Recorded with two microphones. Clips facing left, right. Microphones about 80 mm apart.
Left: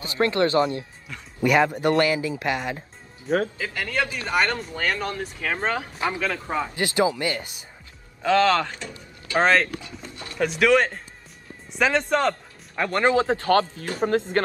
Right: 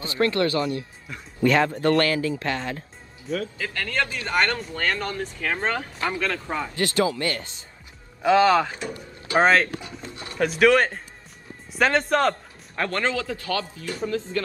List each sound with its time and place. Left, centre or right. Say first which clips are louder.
0.0 s speech: left 1 dB; left
1.4 s speech: even; centre
8.2 s speech: right 2 dB; centre
10.1 s music: right 1 dB; right
10.6 s speech: right 1 dB; centre
12.8 s speech: left 5 dB; left
13.5 s speech: left 8 dB; left
14.0 s speech: left 5 dB; left